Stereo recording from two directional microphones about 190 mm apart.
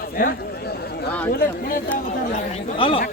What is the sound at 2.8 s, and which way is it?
Speech, 30° left (ahead or behind).